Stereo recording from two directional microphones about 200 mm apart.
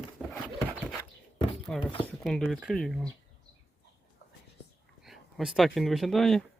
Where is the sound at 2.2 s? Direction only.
Centre (ahead or behind).